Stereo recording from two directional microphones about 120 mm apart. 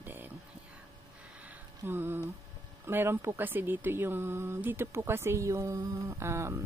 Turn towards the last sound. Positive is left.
turn(degrees=-20)  # may be behind; listen again after turning